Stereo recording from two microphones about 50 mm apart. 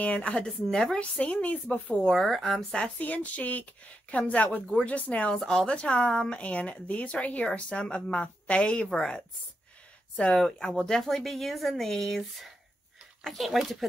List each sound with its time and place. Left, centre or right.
0.0 s a woman's voice: left
0.5 s speech: centre
0.9 s a woman's voice: left
2.0 s speech: centre
3.0 s a woman's voice: left; by 13.8 s centre